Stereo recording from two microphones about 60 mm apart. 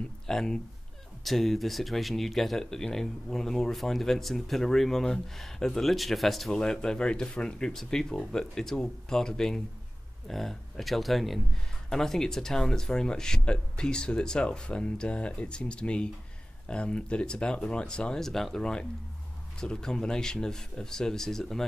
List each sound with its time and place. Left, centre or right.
0.3 s speech: centre